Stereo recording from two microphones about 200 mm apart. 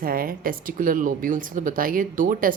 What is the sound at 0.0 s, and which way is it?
Speech, 45° right (ahead or behind).